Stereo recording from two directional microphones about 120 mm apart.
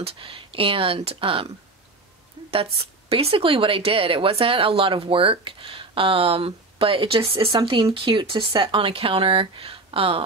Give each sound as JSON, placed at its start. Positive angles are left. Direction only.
{"t": 0.0, "sound": "speech", "side_deg": -50}
{"t": 2.5, "sound": "speech", "side_deg": -50}